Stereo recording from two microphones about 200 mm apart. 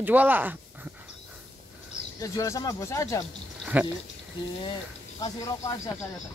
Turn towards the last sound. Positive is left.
turn(degrees=20)  # may be behind; listen again after turning